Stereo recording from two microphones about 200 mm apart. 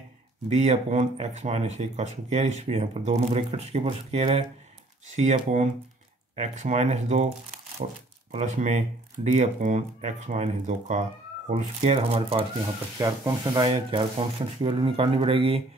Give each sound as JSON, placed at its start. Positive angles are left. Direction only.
{"t": 0.5, "sound": "speech", "side_deg": -35}